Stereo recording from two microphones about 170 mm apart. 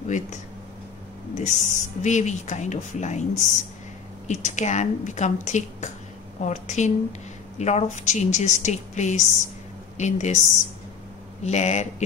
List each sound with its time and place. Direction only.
1.3 s a woman's voice: 45° left (ahead or behind)
11.4 s a woman's voice: 40° left (ahead or behind)